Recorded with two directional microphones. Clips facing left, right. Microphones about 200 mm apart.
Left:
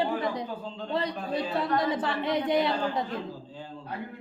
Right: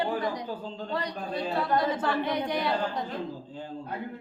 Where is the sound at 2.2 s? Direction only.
25° left (ahead or behind).